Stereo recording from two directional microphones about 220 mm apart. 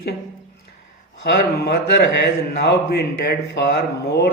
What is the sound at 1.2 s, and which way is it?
Speech, 50° left (ahead or behind).